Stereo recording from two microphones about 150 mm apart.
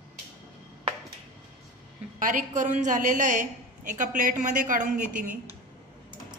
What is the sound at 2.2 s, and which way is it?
A woman's voice, 60° right (ahead or behind).